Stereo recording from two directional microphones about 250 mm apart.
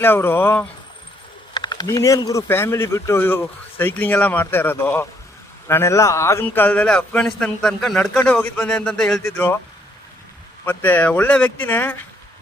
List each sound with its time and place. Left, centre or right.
0.0 s a man's voice: centre
10.7 s a man's voice: centre